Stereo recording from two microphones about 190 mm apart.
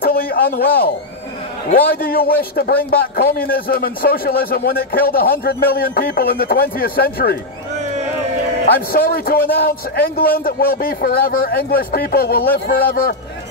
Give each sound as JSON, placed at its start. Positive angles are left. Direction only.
{"t": 0.0, "sound": "a sound", "side_deg": 50}
{"t": 1.7, "sound": "a man's voice", "side_deg": 50}
{"t": 8.9, "sound": "a man's voice", "side_deg": 50}
{"t": 9.4, "sound": "a man's voice", "side_deg": 10}
{"t": 10.3, "sound": "a man's voice", "side_deg": 50}